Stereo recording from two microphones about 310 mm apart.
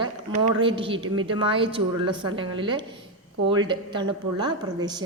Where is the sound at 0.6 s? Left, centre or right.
Centre.